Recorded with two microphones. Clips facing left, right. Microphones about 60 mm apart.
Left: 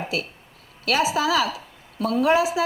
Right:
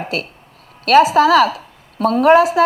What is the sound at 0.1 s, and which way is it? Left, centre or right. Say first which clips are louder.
A woman's voice: right 4 dB; right.